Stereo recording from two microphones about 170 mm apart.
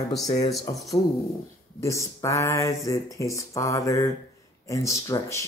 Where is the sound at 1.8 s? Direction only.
20° left (ahead or behind).